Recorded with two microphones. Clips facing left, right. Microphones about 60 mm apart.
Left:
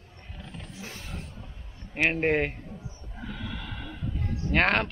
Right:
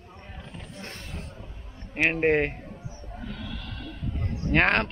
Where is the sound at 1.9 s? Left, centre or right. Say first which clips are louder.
Right 2 dB; centre.